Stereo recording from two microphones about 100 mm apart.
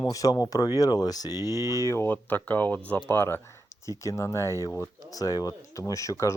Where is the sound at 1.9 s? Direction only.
25° left (ahead or behind).